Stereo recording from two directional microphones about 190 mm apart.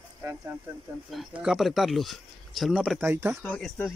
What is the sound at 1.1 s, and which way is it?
Speech, 5° right (ahead or behind).